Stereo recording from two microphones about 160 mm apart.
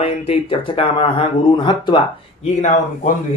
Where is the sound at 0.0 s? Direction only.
35° left (ahead or behind).